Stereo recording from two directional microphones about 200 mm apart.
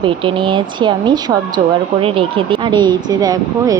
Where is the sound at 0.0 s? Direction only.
25° right (ahead or behind).